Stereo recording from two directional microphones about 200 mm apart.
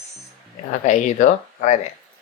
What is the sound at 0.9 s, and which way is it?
Speech, 40° left (ahead or behind).